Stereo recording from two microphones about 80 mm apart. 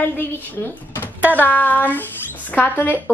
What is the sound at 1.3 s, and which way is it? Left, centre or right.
A child's voice, centre.